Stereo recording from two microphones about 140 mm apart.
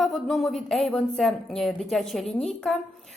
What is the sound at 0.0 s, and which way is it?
Speech, centre (ahead or behind).